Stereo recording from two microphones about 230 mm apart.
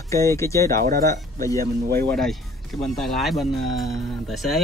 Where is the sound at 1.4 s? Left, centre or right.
Centre.